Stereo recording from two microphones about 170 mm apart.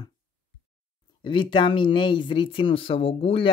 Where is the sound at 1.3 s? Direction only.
30° left (ahead or behind).